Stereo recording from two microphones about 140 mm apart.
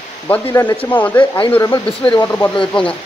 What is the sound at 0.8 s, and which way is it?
Speech, 10° left (ahead or behind).